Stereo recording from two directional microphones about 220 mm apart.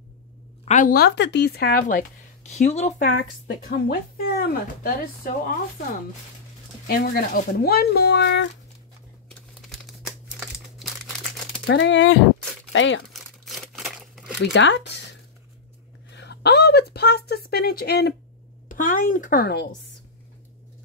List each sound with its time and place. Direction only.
0.7 s speech: 35° left (ahead or behind)
3.0 s speech: 45° left (ahead or behind)
6.9 s speech: 45° left (ahead or behind)
9.3 s crumpling: centre (ahead or behind)
11.6 s speech: 55° left (ahead or behind)
13.1 s crumpling: centre (ahead or behind)
14.4 s speech: 55° left (ahead or behind)
16.1 s a woman's voice: 50° left (ahead or behind)